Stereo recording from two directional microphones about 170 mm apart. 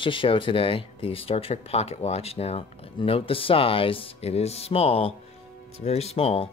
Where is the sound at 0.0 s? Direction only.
30° left (ahead or behind).